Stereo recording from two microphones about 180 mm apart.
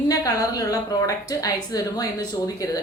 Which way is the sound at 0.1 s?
20° left (ahead or behind).